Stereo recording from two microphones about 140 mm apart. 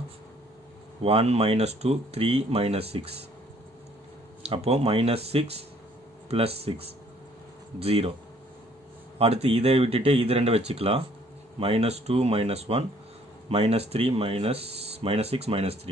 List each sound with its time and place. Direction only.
1.0 s speech: 45° right (ahead or behind)
4.4 s speech: 45° right (ahead or behind)
9.2 s speech: 45° right (ahead or behind)